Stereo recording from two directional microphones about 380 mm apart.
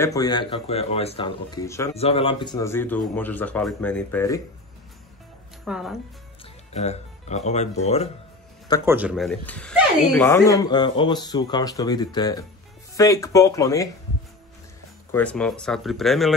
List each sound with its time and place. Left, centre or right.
0.0 s speech: centre
5.7 s speech: centre
6.4 s speech: centre
8.8 s speech: centre
15.0 s speech: centre